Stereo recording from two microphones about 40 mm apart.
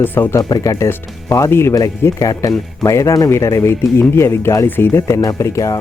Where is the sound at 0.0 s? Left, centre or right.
Left.